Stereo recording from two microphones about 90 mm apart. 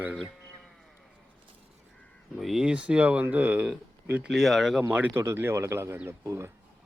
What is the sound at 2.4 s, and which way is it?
Speech, 5° right (ahead or behind).